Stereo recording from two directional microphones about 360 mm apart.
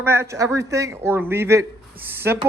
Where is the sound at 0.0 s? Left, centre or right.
Centre.